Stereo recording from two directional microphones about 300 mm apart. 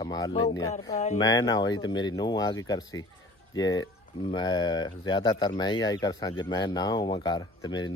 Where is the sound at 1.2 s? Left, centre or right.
Centre.